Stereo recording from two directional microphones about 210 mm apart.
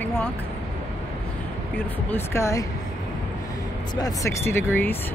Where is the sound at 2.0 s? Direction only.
10° left (ahead or behind).